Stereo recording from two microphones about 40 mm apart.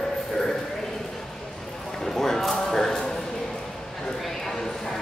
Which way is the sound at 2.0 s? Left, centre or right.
Centre.